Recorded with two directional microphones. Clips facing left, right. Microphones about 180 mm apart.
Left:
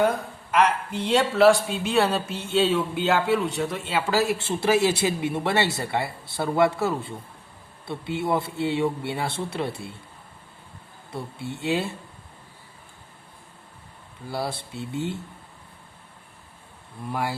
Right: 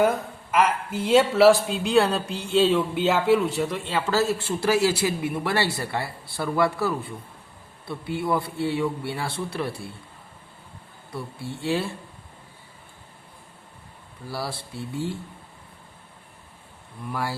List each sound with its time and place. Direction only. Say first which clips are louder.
0.5 s speech: left 1 dB; 5° right (ahead or behind); by 9.9 s 25° left (ahead or behind)
11.1 s speech: left 1 dB; 20° left (ahead or behind)
14.3 s speech: left 2 dB; 20° left (ahead or behind)
17.0 s speech: left 1 dB; 20° left (ahead or behind)